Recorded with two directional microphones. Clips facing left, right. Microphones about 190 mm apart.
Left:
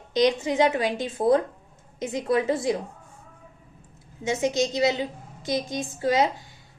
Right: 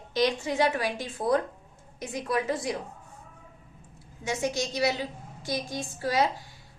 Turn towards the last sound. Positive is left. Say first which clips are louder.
# left 4 dB
turn(degrees=20)  # may be behind; listen again after turning